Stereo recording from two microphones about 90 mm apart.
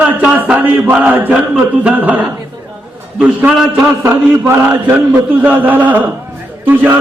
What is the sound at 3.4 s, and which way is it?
Speech, 15° right (ahead or behind).